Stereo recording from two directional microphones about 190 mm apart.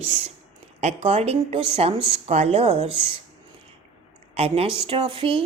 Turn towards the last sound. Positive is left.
turn(degrees=-30)  # may be behind; listen again after turning